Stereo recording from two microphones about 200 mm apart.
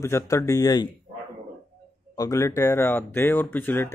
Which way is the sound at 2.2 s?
15° left (ahead or behind).